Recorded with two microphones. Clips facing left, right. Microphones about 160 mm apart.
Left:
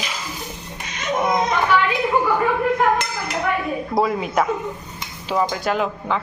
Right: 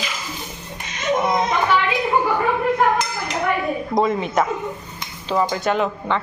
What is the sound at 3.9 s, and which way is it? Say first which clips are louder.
A woman's voice: even; 5° left (ahead or behind).